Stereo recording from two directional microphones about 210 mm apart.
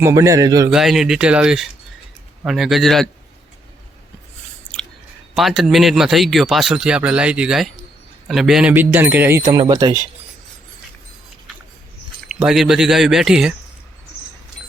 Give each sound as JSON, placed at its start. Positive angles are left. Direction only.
{"t": 0.0, "sound": "speech", "side_deg": -15}
{"t": 0.7, "sound": "speech", "side_deg": 0}
{"t": 5.3, "sound": "speech", "side_deg": 0}
{"t": 12.3, "sound": "speech", "side_deg": -5}